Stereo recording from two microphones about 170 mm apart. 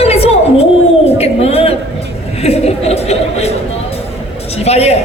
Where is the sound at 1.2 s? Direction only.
35° left (ahead or behind).